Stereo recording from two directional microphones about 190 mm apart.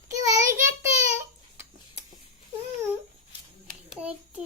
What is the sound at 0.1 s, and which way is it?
Child singing, 15° right (ahead or behind).